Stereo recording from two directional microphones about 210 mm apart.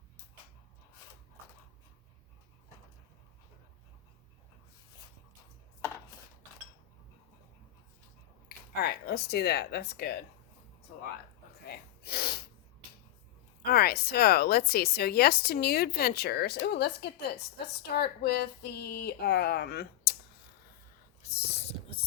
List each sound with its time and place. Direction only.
8.4 s speech: 50° left (ahead or behind)
11.6 s gasp: 50° left (ahead or behind)
13.7 s a woman's voice: 50° left (ahead or behind)
21.2 s a sound: 30° left (ahead or behind)